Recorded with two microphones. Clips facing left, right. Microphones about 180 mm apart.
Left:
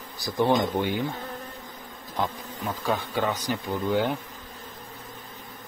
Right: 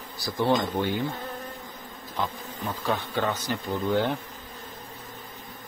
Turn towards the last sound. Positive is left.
turn(degrees=10)  # may be behind; listen again after turning